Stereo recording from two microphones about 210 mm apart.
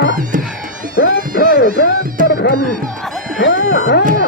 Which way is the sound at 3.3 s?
65° left (ahead or behind).